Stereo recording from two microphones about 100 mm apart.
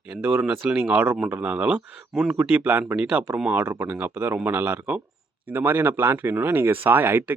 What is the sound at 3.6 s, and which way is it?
Speech, 25° right (ahead or behind).